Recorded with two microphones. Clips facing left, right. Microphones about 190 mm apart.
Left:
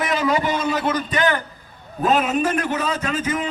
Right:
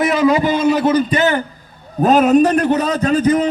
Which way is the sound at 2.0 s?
40° right (ahead or behind).